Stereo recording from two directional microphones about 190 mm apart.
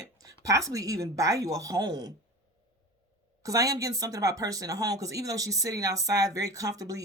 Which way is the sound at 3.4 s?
15° right (ahead or behind).